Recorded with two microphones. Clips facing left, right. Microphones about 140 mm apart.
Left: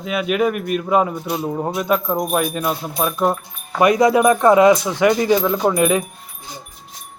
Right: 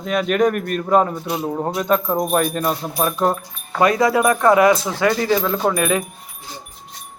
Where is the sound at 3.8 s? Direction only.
20° left (ahead or behind).